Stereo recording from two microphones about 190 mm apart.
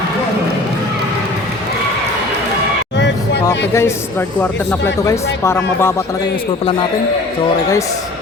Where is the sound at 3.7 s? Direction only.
15° left (ahead or behind).